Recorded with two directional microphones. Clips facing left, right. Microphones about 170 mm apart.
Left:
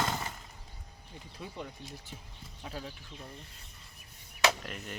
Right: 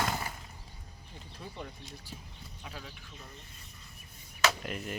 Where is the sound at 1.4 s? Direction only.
5° left (ahead or behind).